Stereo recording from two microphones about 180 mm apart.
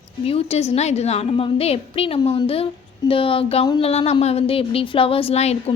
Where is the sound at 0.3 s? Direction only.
35° left (ahead or behind).